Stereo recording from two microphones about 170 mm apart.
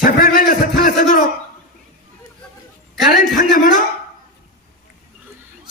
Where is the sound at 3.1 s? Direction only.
55° left (ahead or behind).